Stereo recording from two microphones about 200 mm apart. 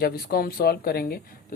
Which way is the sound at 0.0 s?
50° left (ahead or behind).